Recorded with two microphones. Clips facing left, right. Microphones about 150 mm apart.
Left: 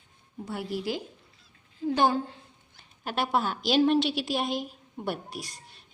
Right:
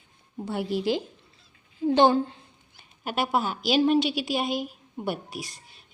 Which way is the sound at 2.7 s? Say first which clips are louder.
Right 2 dB; 10° right (ahead or behind).